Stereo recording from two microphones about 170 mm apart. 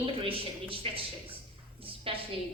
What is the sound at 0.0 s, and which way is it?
A woman's voice, 35° right (ahead or behind).